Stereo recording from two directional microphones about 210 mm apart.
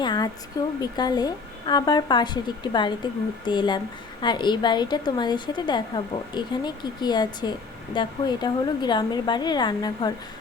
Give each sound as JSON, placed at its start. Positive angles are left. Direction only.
{"t": 0.0, "sound": "a woman's voice", "side_deg": 20}